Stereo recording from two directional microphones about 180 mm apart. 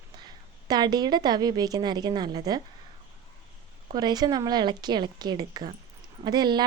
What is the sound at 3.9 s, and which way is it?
Speech, 20° right (ahead or behind).